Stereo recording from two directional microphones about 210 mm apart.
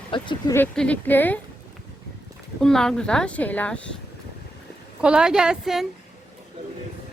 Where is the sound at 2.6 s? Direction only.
Centre (ahead or behind).